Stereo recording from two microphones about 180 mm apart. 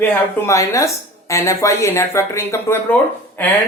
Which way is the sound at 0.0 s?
15° left (ahead or behind).